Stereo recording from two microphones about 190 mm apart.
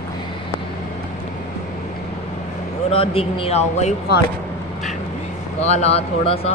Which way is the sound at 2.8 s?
30° left (ahead or behind).